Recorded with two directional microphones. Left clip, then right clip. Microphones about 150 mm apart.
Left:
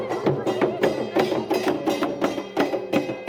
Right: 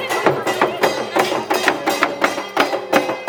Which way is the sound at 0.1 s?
15° right (ahead or behind).